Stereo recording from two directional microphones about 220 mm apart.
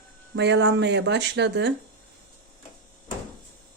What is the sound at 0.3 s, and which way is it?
Speech, 50° right (ahead or behind).